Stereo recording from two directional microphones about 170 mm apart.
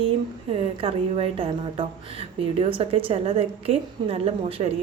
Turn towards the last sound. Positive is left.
turn(degrees=-35)  # may be behind; listen again after turning